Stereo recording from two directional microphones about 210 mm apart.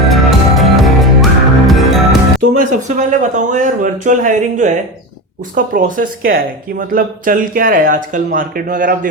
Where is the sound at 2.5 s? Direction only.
35° right (ahead or behind).